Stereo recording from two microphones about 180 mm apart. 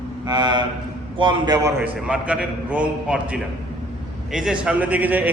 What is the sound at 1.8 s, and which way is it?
A man's voice, 5° right (ahead or behind).